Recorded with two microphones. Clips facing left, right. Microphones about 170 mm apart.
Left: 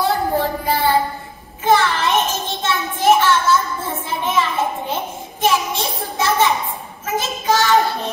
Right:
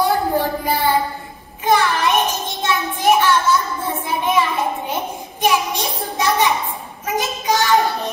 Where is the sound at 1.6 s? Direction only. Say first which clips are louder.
Left 1 dB; 15° right (ahead or behind).